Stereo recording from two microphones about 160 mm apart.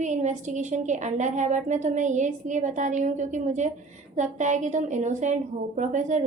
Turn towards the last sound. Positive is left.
turn(degrees=-50)  # may be behind; listen again after turning